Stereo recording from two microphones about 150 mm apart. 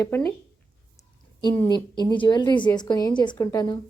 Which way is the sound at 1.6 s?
30° left (ahead or behind).